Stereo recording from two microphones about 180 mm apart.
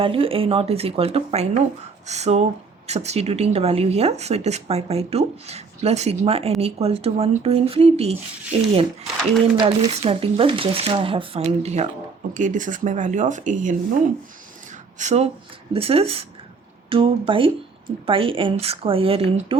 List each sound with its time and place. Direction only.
0.0 s a woman's voice: 30° right (ahead or behind)
9.6 s a woman's voice: 30° right (ahead or behind); by 13.7 s 45° right (ahead or behind)
14.9 s a woman's voice: 40° right (ahead or behind)
19.5 s a sound: 30° right (ahead or behind)